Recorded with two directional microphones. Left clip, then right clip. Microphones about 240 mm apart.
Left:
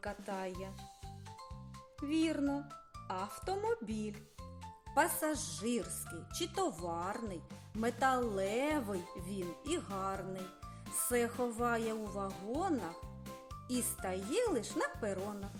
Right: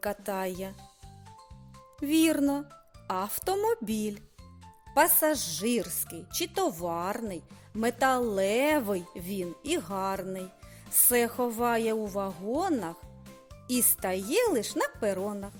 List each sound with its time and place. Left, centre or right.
0.0 s speech: right
2.0 s speech: right